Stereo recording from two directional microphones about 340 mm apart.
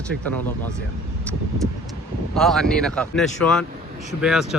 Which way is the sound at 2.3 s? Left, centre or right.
Centre.